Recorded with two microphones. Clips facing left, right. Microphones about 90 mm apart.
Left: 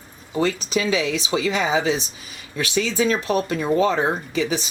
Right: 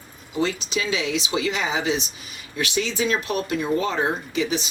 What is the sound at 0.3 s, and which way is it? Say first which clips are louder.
Speech: left 3 dB; 40° left (ahead or behind).